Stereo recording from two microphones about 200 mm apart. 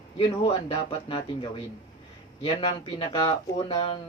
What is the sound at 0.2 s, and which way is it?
Speech, 25° left (ahead or behind).